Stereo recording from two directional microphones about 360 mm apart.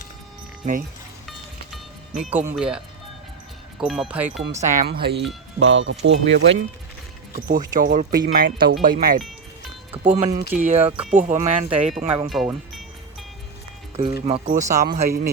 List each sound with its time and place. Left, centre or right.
0.6 s speech: right
2.2 s speech: centre
4.5 s speech: right
12.0 s speech: centre
13.9 s speech: centre
14.8 s speech: right